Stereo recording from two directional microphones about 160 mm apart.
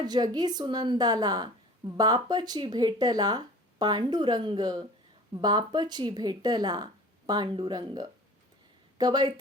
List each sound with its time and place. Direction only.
0.0 s speech: 25° right (ahead or behind)